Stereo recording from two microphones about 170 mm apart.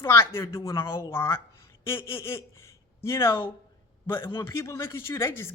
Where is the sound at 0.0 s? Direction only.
15° left (ahead or behind).